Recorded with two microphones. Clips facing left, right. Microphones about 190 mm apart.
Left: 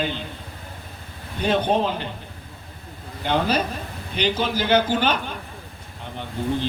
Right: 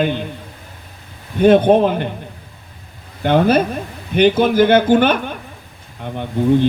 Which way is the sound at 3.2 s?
55° right (ahead or behind).